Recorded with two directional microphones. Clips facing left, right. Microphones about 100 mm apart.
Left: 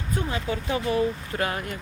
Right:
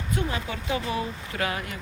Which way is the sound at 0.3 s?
35° left (ahead or behind).